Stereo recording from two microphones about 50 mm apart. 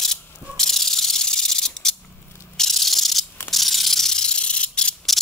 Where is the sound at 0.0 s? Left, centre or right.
Centre.